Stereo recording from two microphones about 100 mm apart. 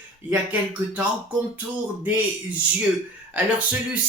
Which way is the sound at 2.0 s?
15° right (ahead or behind).